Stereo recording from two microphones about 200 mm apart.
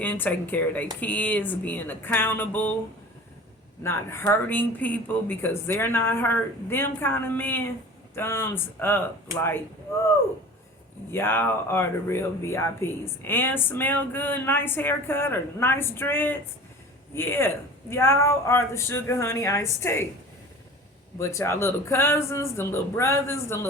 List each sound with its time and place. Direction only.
0.0 s speech: 10° left (ahead or behind)
3.8 s speech: 10° left (ahead or behind)
11.1 s speech: 10° left (ahead or behind)
21.2 s speech: 15° left (ahead or behind)